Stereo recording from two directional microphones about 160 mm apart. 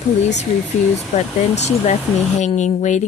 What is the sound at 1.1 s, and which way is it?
Speech, 45° left (ahead or behind).